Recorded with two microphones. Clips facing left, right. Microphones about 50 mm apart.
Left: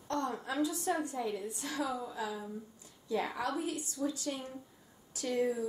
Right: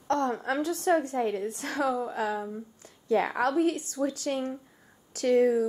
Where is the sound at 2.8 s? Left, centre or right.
Right.